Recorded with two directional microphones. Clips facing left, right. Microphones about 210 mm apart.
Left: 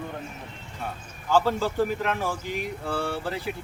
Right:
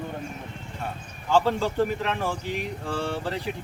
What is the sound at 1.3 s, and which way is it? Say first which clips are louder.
A man's voice: right 1 dB; 5° left (ahead or behind).